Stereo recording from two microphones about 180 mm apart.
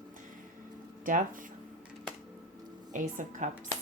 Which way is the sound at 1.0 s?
50° right (ahead or behind).